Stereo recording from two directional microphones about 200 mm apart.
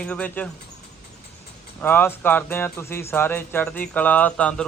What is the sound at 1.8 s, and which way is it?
Speech, 10° left (ahead or behind).